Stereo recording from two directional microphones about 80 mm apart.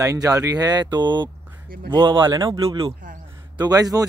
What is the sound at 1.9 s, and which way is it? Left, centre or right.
Speech, right.